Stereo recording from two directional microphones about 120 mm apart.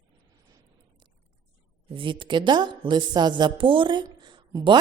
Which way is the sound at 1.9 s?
45° right (ahead or behind).